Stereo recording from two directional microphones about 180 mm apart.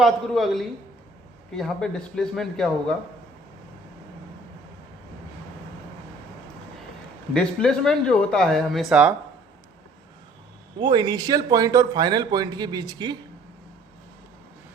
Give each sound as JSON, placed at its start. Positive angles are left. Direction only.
{"t": 0.0, "sound": "speech", "side_deg": 0}
{"t": 7.3, "sound": "speech", "side_deg": 5}
{"t": 10.8, "sound": "speech", "side_deg": -25}